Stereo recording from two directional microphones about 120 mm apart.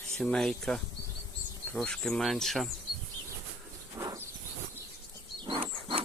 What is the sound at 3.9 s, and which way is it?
Insect, 30° right (ahead or behind).